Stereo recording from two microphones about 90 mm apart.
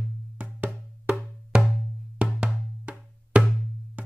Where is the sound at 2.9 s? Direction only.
15° right (ahead or behind).